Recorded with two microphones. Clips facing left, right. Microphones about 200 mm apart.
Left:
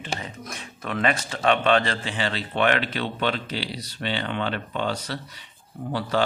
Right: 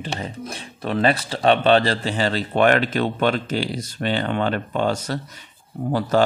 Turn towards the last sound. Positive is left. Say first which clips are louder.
# right 6 dB
turn(degrees=-45)  # may be behind; listen again after turning